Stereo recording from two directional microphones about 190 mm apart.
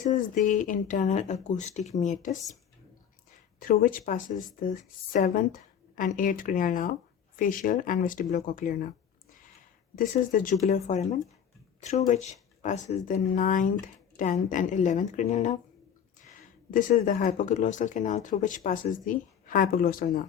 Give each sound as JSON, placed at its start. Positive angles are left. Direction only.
{"t": 0.0, "sound": "speech", "side_deg": 40}
{"t": 3.6, "sound": "speech", "side_deg": 45}
{"t": 9.9, "sound": "speech", "side_deg": 45}
{"t": 16.7, "sound": "speech", "side_deg": 45}